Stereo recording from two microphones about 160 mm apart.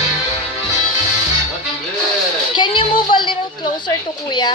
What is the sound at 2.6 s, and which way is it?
Music, 30° left (ahead or behind).